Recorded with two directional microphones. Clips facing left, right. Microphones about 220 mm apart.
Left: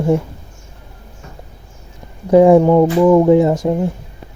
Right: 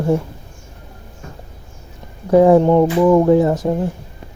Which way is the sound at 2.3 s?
15° left (ahead or behind).